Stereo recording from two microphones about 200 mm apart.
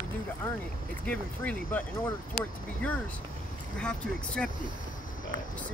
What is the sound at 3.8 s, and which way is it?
Speech, 5° left (ahead or behind).